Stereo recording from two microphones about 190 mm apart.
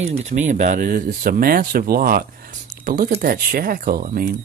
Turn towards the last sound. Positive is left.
turn(degrees=-50)  # may be behind; listen again after turning